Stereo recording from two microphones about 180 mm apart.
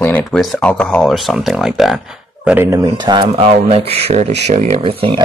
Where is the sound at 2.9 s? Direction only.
25° right (ahead or behind); by 4.8 s 45° right (ahead or behind).